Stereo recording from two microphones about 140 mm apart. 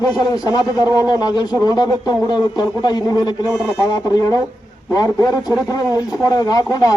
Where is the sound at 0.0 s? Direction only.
25° left (ahead or behind).